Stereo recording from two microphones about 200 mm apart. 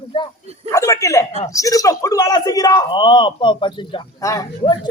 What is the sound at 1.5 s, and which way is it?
A man's voice, 15° left (ahead or behind).